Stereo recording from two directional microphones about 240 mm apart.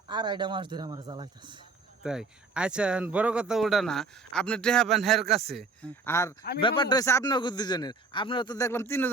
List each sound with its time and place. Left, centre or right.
0.1 s a man's voice: centre
2.0 s speech: centre
6.1 s speech: centre